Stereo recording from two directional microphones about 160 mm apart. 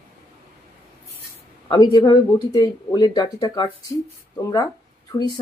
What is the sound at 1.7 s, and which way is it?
Speech, 25° left (ahead or behind).